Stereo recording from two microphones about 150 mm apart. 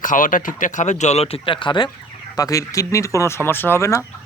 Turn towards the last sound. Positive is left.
turn(degrees=20)  # may be behind; listen again after turning